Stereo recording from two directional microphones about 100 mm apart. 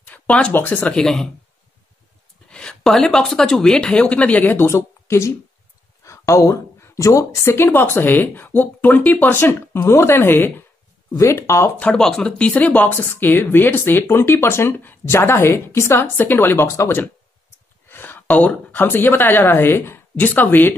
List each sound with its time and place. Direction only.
0.0 s speech: 15° left (ahead or behind)
0.9 s speech: 5° left (ahead or behind)
2.5 s speech: 5° left (ahead or behind); by 11.7 s 30° left (ahead or behind)
11.7 s speech: 10° left (ahead or behind)